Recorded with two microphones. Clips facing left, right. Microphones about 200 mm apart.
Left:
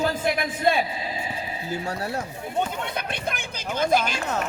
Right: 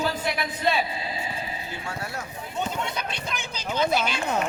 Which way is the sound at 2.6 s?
55° left (ahead or behind).